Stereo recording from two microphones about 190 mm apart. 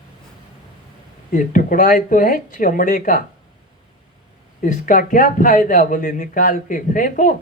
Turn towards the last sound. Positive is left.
turn(degrees=45)  # may be behind; listen again after turning